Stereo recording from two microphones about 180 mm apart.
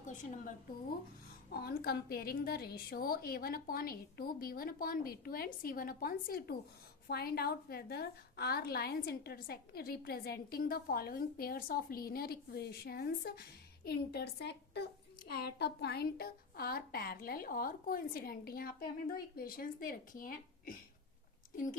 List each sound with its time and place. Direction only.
0.0 s a woman's voice: 45° left (ahead or behind)
1.5 s a woman's voice: 60° left (ahead or behind)